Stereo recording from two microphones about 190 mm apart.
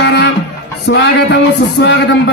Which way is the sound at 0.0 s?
65° left (ahead or behind).